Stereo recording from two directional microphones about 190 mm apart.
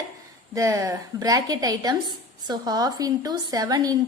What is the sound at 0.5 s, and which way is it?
A woman's voice, 15° right (ahead or behind).